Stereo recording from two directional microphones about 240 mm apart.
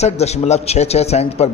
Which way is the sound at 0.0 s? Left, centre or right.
Left.